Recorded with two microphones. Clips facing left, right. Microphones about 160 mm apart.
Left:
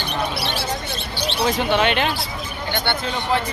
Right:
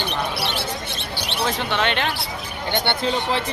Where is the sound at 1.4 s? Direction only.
10° left (ahead or behind).